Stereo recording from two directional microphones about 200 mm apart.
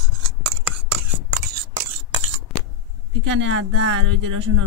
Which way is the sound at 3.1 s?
70° right (ahead or behind).